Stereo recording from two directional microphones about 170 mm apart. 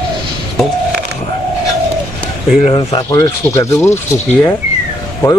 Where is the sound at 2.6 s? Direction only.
35° left (ahead or behind).